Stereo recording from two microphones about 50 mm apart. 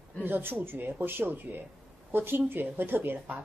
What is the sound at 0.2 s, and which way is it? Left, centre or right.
A woman's voice, right.